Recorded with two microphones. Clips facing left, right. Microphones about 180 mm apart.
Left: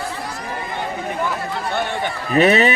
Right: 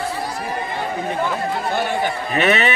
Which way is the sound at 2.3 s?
35° left (ahead or behind).